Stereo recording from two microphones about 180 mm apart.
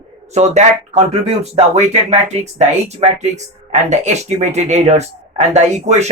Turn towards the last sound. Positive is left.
turn(degrees=-40)  # may be behind; listen again after turning